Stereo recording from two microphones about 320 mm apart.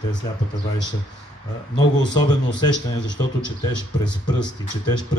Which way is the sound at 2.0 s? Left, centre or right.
Left.